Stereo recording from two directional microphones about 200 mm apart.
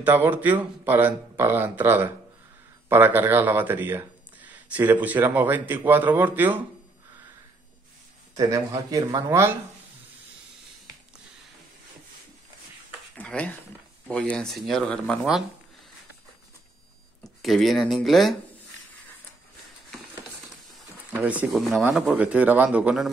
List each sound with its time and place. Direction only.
0.0 s speech: 10° right (ahead or behind)
8.4 s speech: 15° right (ahead or behind)
13.1 s a sound: 5° left (ahead or behind)
14.3 s speech: centre (ahead or behind)
17.2 s speech: centre (ahead or behind)
21.1 s speech: 10° right (ahead or behind)